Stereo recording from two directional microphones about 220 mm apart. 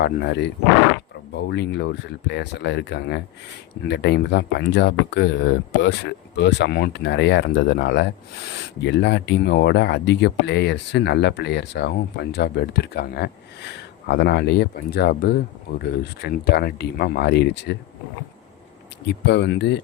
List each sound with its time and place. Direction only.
0.0 s speech: 50° left (ahead or behind)
19.0 s speech: 50° left (ahead or behind)